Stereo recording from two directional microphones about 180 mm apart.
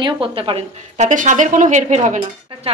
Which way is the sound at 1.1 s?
45° right (ahead or behind).